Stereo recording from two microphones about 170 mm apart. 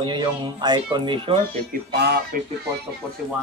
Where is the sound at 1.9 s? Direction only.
75° right (ahead or behind).